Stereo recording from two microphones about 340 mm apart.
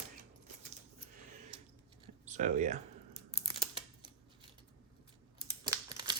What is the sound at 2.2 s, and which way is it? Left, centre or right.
Speech, right.